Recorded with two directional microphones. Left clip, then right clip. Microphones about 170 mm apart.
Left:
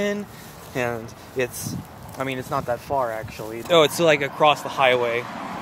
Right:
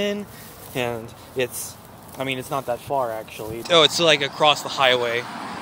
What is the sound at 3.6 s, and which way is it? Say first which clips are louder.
Speech: right 1 dB; 15° left (ahead or behind).